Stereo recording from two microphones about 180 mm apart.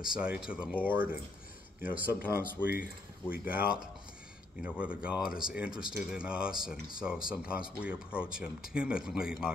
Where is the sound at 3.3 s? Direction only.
55° left (ahead or behind).